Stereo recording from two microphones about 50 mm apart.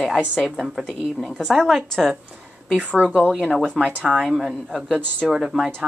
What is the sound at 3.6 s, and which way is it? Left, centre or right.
Speech, centre.